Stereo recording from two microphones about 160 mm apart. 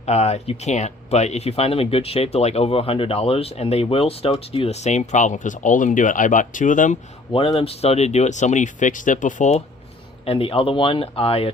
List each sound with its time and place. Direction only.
0.0 s speech: 40° left (ahead or behind)
7.3 s speech: 35° left (ahead or behind)
10.2 s speech: 35° left (ahead or behind)